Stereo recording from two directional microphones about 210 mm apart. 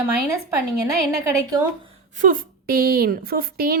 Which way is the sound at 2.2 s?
40° right (ahead or behind).